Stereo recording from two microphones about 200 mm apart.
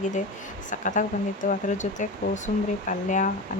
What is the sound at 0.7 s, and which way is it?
Speech, 40° left (ahead or behind).